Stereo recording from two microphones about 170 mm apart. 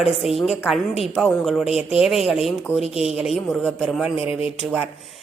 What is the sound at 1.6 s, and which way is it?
Speech, 35° left (ahead or behind).